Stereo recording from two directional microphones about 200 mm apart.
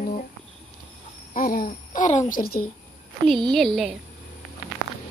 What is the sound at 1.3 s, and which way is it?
Speech, 45° left (ahead or behind).